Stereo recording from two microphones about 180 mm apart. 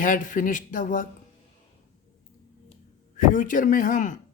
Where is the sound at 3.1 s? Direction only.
45° left (ahead or behind).